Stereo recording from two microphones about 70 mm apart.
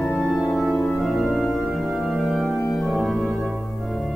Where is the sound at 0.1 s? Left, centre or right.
Centre.